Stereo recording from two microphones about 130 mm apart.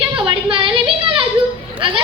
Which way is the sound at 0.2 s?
40° right (ahead or behind).